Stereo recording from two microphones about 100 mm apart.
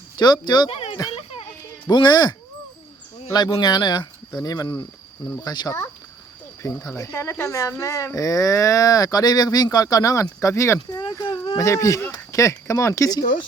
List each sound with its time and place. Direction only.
0.2 s speech: 45° left (ahead or behind)
0.7 s a sound: 75° left (ahead or behind)
1.9 s speech: 45° left (ahead or behind)
3.6 s speech: 45° left (ahead or behind)